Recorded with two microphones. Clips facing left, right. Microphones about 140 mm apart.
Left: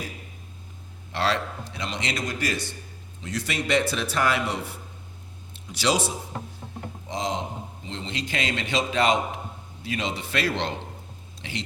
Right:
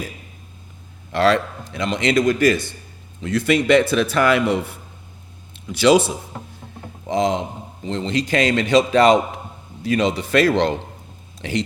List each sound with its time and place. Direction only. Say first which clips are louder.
1.1 s a man's voice: right 9 dB; 50° right (ahead or behind)
5.6 s a man's voice: right 10 dB; 60° right (ahead or behind)
7.1 s a man's voice: right 9 dB; 55° right (ahead or behind)
7.9 s speech: right 12 dB; 45° right (ahead or behind)